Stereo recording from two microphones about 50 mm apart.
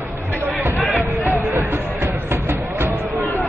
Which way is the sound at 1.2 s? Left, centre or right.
Right.